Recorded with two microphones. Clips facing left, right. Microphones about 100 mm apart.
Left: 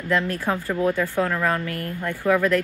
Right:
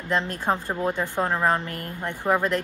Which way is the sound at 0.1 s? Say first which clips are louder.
Left 1 dB; 20° right (ahead or behind).